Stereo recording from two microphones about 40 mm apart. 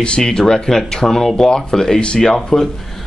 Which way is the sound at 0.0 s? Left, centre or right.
Left.